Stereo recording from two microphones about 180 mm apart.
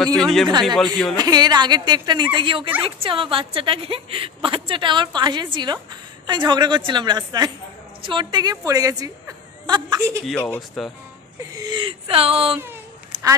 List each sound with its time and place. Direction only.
0.0 s speech: 5° left (ahead or behind)
0.5 s a woman's voice: 25° right (ahead or behind)
9.7 s chuckle: 25° right (ahead or behind)
10.2 s speech: 5° left (ahead or behind)
11.5 s speech: 25° right (ahead or behind)
13.1 s quack: 20° right (ahead or behind)